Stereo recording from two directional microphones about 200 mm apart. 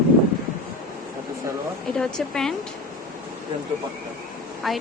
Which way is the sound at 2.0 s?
Centre (ahead or behind).